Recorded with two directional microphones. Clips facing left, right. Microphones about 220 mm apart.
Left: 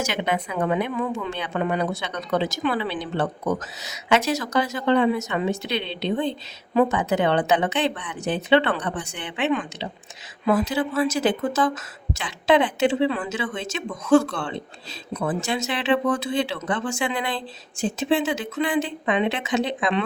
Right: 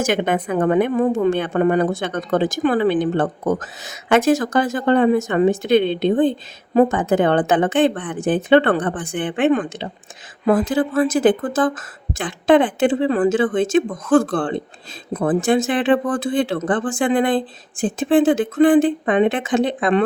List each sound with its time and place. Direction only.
0.0 s a woman's voice: 50° right (ahead or behind)